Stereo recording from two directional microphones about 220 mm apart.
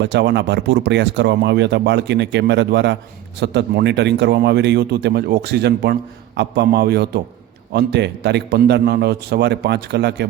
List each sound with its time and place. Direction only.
0.0 s speech: 50° right (ahead or behind)